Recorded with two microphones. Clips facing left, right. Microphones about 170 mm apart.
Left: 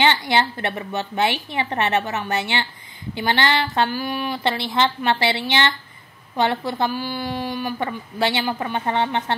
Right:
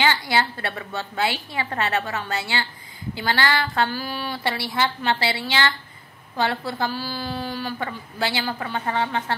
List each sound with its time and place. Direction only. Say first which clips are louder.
0.0 s a woman's voice: left 3 dB; 25° left (ahead or behind)